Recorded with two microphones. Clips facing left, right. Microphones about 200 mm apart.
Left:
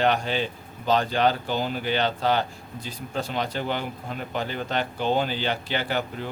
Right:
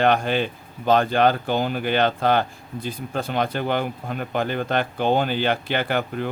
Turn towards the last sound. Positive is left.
turn(degrees=-55)  # may be behind; listen again after turning